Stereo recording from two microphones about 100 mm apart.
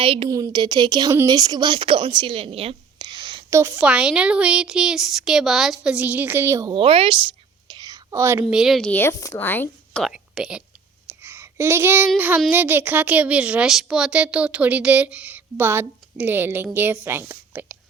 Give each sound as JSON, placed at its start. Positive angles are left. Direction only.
{"t": 0.0, "sound": "a woman's voice", "side_deg": -65}
{"t": 0.3, "sound": "a woman's voice", "side_deg": -35}
{"t": 3.0, "sound": "a sound", "side_deg": -50}
{"t": 3.8, "sound": "a woman's voice", "side_deg": -10}
{"t": 6.7, "sound": "whispering", "side_deg": -65}
{"t": 8.4, "sound": "speech", "side_deg": -5}
{"t": 9.0, "sound": "a woman's voice", "side_deg": 30}
{"t": 10.0, "sound": "a woman's voice", "side_deg": -5}
{"t": 11.1, "sound": "a sound", "side_deg": -20}
{"t": 12.5, "sound": "a woman's voice", "side_deg": -20}